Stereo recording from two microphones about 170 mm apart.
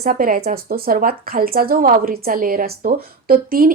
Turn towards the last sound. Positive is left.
turn(degrees=-60)  # may be behind; listen again after turning